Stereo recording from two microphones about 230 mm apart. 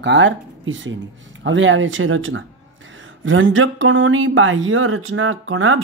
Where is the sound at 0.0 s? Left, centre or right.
Right.